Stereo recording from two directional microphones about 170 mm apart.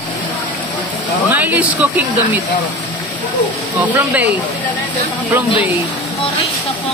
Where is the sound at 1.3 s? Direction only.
10° right (ahead or behind).